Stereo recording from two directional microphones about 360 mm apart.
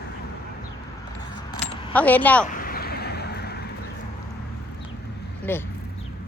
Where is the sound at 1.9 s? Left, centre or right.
Centre.